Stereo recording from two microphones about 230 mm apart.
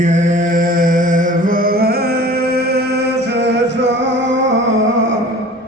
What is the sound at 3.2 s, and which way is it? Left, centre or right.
Music, right.